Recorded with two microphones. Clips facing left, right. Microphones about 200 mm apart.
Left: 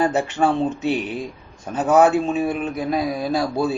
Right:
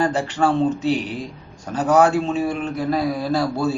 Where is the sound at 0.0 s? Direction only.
20° left (ahead or behind).